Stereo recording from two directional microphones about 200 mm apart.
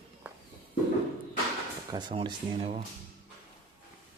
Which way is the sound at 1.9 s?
20° right (ahead or behind).